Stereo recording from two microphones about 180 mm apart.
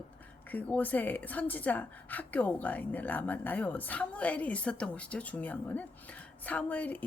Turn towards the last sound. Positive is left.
turn(degrees=10)  # may be behind; listen again after turning